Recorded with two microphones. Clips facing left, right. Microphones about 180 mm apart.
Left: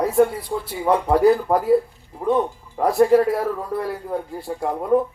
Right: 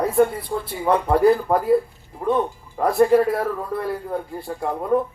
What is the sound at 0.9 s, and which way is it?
A man's voice, 5° left (ahead or behind).